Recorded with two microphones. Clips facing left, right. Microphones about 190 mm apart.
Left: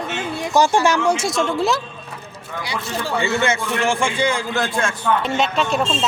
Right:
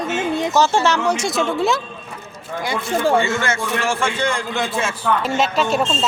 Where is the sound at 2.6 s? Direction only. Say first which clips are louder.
Right 6 dB; 50° right (ahead or behind).